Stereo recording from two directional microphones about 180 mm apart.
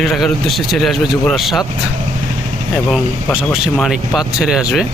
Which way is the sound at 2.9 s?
Centre (ahead or behind).